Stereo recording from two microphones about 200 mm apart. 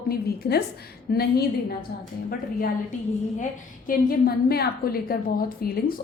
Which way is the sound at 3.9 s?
50° left (ahead or behind).